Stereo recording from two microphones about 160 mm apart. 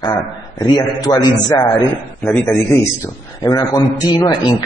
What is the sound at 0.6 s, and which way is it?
A man's voice, 25° left (ahead or behind).